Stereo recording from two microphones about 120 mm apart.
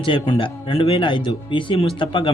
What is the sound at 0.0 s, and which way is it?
Speech, 45° left (ahead or behind).